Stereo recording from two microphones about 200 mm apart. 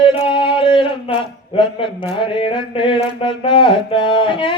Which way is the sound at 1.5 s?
25° left (ahead or behind).